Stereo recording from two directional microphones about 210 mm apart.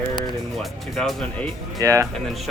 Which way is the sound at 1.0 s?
5° left (ahead or behind).